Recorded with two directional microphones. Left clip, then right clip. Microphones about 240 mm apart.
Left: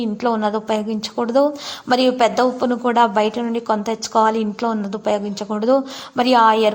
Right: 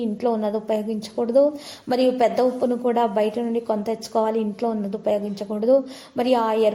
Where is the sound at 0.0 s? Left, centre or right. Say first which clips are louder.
Left 3 dB; centre.